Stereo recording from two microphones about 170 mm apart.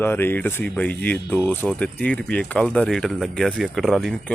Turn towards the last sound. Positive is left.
turn(degrees=0)  # may be behind; listen again after turning